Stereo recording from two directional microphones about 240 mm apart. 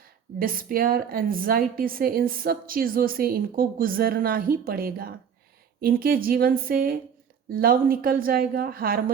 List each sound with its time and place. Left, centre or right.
0.3 s a woman's voice: right